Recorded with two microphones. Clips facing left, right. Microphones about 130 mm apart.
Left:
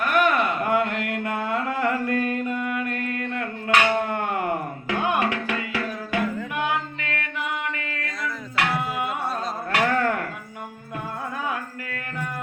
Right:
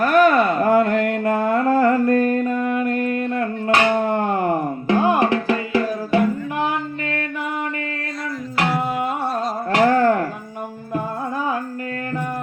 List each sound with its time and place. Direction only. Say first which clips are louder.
0.0 s music: right 7 dB; 35° right (ahead or behind)
8.5 s music: right 4 dB; 30° right (ahead or behind)